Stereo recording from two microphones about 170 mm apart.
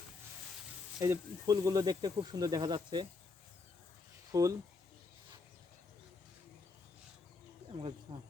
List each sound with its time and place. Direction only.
0.9 s speech: 20° right (ahead or behind)
4.3 s speech: 20° right (ahead or behind)
7.7 s speech: 35° right (ahead or behind)